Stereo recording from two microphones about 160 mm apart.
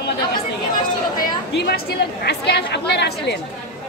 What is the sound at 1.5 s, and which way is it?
A woman's voice, 85° left.